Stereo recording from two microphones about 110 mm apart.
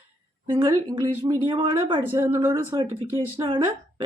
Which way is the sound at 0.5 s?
35° right (ahead or behind).